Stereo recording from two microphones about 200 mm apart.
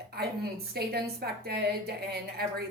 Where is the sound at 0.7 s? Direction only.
50° right (ahead or behind).